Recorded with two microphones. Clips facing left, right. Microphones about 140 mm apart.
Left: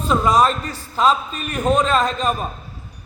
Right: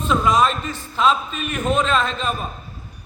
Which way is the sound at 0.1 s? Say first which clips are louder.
Left 2 dB; 35° left (ahead or behind).